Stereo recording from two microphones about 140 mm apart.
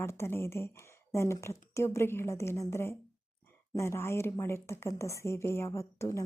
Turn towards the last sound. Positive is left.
turn(degrees=20)  # may be behind; listen again after turning